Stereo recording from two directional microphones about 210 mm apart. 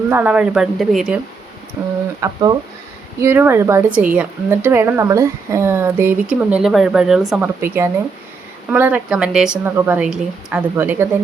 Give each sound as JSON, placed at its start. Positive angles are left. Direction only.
{"t": 0.1, "sound": "speech", "side_deg": -5}
{"t": 1.8, "sound": "a woman's voice", "side_deg": -15}